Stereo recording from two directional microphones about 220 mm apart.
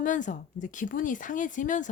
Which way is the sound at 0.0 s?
35° left (ahead or behind).